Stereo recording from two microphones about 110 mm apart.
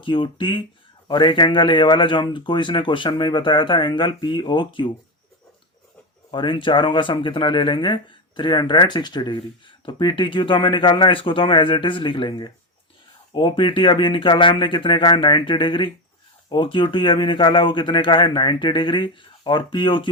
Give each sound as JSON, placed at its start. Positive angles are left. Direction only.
{"t": 0.0, "sound": "speech", "side_deg": 50}
{"t": 6.3, "sound": "speech", "side_deg": 50}